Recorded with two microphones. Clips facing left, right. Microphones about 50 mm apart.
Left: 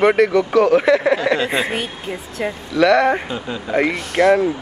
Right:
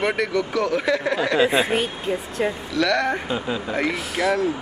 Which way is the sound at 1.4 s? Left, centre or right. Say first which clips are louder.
Right 1 dB; centre.